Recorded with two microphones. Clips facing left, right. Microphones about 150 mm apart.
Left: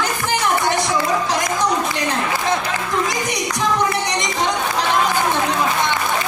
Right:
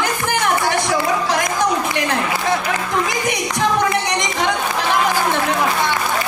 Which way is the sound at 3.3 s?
60° right (ahead or behind).